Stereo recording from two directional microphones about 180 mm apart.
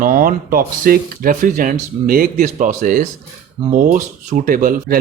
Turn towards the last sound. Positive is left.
turn(degrees=-50)  # may be behind; listen again after turning